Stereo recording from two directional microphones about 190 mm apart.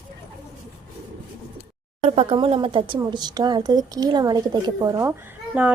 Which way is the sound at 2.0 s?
30° right (ahead or behind).